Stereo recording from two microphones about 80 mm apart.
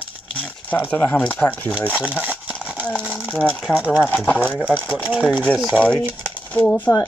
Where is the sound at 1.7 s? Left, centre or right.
Centre.